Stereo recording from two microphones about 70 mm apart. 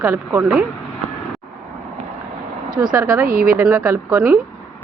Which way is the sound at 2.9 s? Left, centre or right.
Right.